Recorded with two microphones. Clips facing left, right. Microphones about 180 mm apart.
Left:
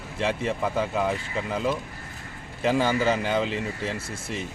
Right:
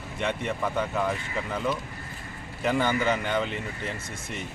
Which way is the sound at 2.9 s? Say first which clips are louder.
Left 2 dB; 30° left (ahead or behind).